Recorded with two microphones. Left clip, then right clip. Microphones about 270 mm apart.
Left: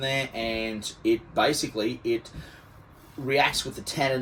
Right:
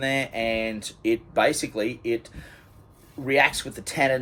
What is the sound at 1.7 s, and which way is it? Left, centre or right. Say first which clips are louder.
Speech: right 1 dB; right.